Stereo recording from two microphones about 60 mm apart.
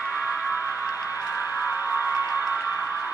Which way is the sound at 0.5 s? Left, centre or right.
Right.